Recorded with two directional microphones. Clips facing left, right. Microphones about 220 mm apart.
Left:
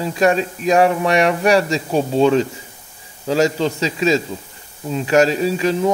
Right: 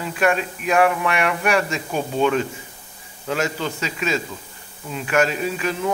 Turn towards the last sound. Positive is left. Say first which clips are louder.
# left 6 dB
turn(degrees=35)  # may be behind; listen again after turning